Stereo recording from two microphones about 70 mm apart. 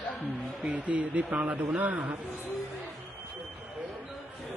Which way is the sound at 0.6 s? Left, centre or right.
Centre.